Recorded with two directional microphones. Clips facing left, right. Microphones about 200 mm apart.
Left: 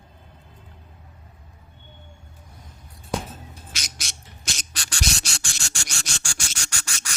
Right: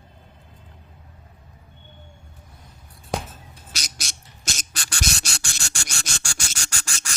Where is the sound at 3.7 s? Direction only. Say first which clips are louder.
Right 5 dB; 40° right (ahead or behind); by 5.9 s 55° right (ahead or behind).